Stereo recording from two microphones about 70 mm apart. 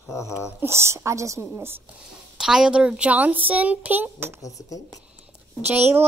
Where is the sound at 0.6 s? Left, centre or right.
Right.